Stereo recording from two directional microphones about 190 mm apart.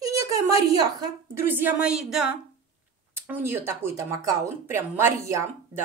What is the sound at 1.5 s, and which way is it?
Speech, 10° right (ahead or behind).